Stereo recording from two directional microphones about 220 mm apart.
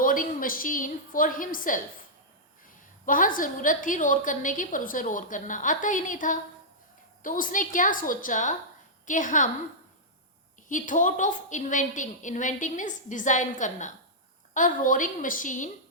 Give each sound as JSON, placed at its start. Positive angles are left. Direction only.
{"t": 0.0, "sound": "a woman's voice", "side_deg": 40}
{"t": 3.1, "sound": "a woman's voice", "side_deg": 40}
{"t": 10.7, "sound": "a woman's voice", "side_deg": 35}